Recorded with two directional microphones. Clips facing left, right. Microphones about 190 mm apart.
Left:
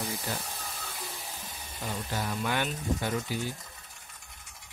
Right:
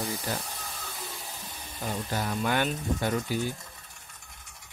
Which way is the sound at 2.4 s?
55° right (ahead or behind).